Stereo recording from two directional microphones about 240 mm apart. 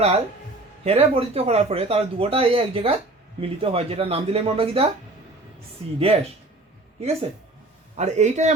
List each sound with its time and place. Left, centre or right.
0.9 s a man's voice: right